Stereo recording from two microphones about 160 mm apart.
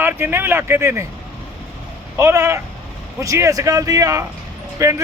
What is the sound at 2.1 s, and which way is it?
Speech, 20° right (ahead or behind).